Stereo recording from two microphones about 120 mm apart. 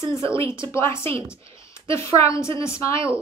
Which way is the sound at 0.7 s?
20° left (ahead or behind).